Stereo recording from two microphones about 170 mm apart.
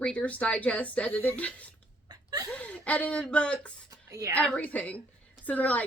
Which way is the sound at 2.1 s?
25° right (ahead or behind).